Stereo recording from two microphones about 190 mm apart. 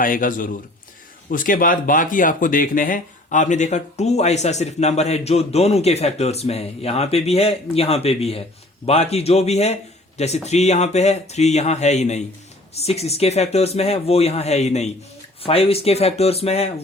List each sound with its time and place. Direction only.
0.0 s a man's voice: 45° left (ahead or behind)